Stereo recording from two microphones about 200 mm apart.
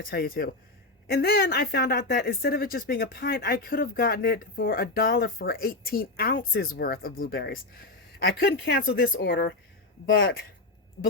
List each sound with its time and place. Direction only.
0.0 s speech: 50° left (ahead or behind)